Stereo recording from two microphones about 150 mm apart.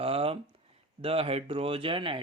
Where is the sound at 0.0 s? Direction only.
40° right (ahead or behind).